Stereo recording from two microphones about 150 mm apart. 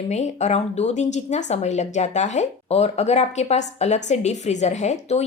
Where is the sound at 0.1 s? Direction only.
50° left (ahead or behind).